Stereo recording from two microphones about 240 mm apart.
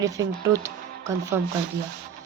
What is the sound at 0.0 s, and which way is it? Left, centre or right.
Speech, centre.